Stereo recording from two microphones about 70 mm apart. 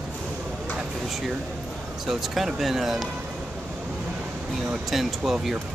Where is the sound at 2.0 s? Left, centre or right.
Centre.